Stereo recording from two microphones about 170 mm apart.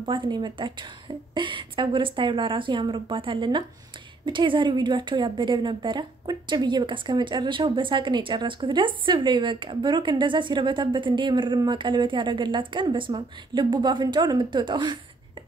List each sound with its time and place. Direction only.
0.0 s a woman's voice: 30° right (ahead or behind)